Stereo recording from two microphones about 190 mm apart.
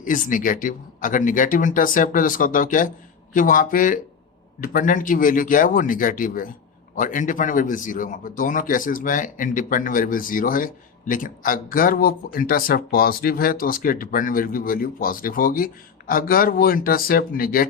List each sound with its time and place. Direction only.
0.0 s speech: 45° left (ahead or behind)